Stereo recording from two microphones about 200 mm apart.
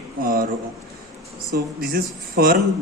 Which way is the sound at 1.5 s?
45° right (ahead or behind).